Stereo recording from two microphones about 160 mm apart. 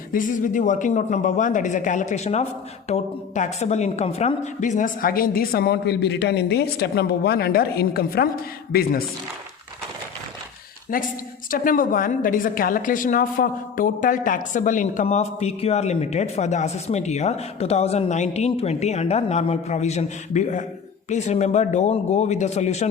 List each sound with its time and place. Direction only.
0.1 s a woman's voice: 55° left (ahead or behind)
10.9 s a woman's voice: 60° left (ahead or behind); by 22.9 s 45° left (ahead or behind)